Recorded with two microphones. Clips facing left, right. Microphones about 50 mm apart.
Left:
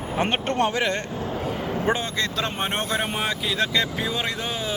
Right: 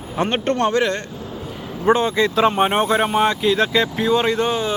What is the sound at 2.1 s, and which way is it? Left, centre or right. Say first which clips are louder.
Sheep: right 10 dB; centre.